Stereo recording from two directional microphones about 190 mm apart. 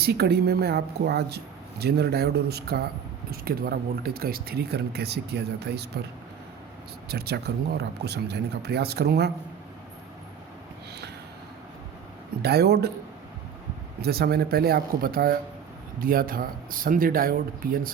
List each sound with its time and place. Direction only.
0.0 s speech: 60° right (ahead or behind)
7.1 s speech: 55° right (ahead or behind)
12.4 s speech: 55° right (ahead or behind)
14.0 s speech: 55° right (ahead or behind)